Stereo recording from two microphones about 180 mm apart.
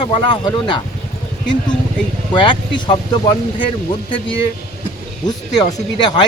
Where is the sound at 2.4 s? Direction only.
25° left (ahead or behind).